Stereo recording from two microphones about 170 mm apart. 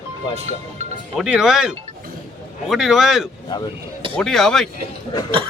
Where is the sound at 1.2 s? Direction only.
5° right (ahead or behind).